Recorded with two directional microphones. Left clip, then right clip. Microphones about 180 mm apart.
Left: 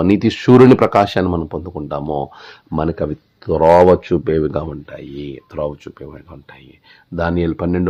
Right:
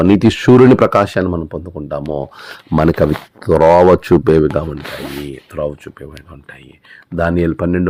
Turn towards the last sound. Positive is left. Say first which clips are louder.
# right 3 dB
turn(degrees=-10)  # may be behind; listen again after turning